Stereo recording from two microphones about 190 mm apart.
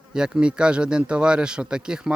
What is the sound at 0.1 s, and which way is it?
Speech, 5° right (ahead or behind).